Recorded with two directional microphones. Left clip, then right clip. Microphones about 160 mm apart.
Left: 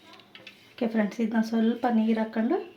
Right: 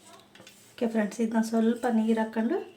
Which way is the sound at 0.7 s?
15° left (ahead or behind).